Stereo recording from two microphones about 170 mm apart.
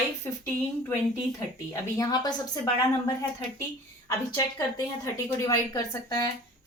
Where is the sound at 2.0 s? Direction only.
25° left (ahead or behind).